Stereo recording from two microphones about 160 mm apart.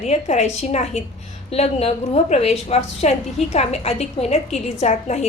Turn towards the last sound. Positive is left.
turn(degrees=45)  # may be behind; listen again after turning